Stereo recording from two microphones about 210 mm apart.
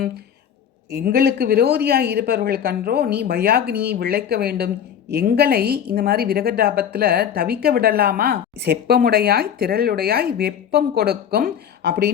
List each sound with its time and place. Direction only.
0.9 s a man's voice: 50° right (ahead or behind)